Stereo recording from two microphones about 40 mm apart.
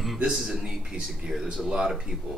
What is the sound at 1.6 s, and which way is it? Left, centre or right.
Speech, centre.